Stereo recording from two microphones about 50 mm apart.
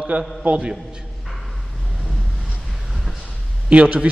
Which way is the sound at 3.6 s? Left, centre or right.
Right.